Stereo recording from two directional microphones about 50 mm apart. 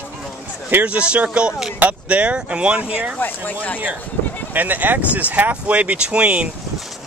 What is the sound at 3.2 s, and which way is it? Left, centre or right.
Speech, left.